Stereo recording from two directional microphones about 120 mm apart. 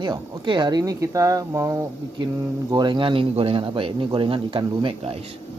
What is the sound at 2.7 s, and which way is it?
A man's voice, 40° right (ahead or behind).